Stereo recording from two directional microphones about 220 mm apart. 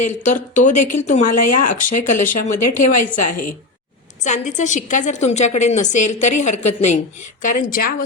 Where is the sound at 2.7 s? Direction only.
35° left (ahead or behind).